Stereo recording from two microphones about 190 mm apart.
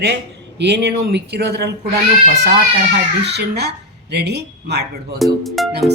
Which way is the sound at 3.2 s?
60° right (ahead or behind).